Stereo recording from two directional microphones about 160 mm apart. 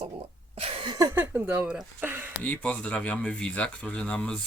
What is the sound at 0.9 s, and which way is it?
Speech, 15° right (ahead or behind).